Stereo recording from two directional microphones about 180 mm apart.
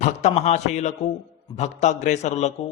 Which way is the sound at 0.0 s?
40° left (ahead or behind).